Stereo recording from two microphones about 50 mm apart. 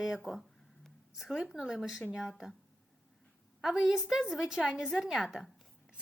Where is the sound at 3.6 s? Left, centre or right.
Centre.